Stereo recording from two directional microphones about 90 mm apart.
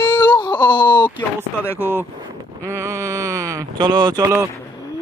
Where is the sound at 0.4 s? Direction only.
55° left (ahead or behind).